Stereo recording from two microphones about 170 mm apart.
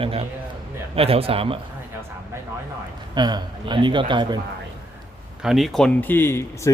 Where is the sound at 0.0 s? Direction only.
35° right (ahead or behind).